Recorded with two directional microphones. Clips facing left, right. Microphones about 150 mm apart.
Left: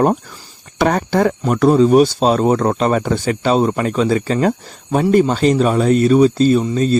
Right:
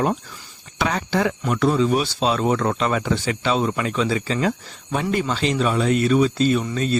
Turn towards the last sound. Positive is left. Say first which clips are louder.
# left 6 dB
turn(degrees=35)  # may be behind; listen again after turning